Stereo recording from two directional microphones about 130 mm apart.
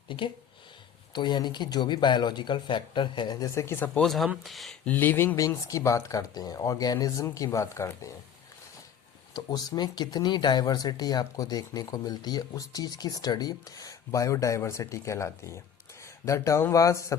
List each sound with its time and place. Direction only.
1.1 s speech: 35° left (ahead or behind); by 4.0 s 15° left (ahead or behind)
4.0 s speech: centre (ahead or behind)
4.9 s speech: 15° left (ahead or behind)
9.3 s speech: 30° left (ahead or behind)